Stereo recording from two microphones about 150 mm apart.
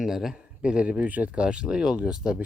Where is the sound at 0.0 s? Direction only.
Centre (ahead or behind).